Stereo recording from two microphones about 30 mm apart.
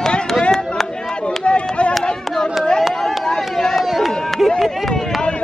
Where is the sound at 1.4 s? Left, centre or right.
Left.